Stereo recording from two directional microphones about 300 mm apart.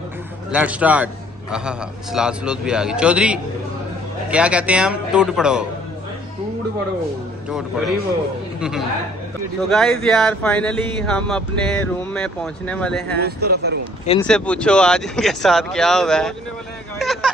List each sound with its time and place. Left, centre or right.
0.5 s speech: centre
7.4 s speech: centre
13.2 s speech: right
14.2 s speech: centre